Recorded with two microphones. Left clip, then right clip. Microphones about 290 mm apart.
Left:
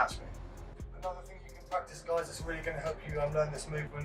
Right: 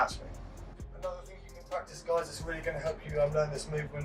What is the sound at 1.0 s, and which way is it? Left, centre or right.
Speech, centre.